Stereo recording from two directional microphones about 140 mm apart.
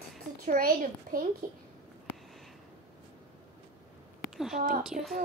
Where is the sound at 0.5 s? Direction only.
90° right.